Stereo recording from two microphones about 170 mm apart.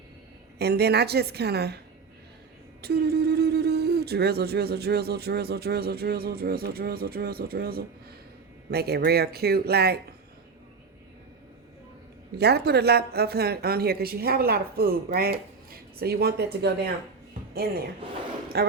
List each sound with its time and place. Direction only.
0.6 s speech: 70° right (ahead or behind)
2.8 s speech: 70° right (ahead or behind)
12.4 s speech: 70° right (ahead or behind)
17.6 s speech: 60° right (ahead or behind)
18.0 s speech: 30° right (ahead or behind)
18.5 s speech: 70° right (ahead or behind)